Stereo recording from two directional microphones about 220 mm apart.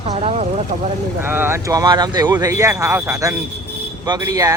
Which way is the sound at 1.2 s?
10° right (ahead or behind).